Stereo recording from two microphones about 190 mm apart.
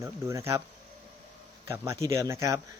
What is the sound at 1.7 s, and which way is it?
Speech, 15° right (ahead or behind).